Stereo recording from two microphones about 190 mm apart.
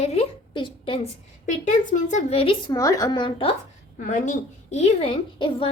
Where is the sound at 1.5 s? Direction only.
40° left (ahead or behind).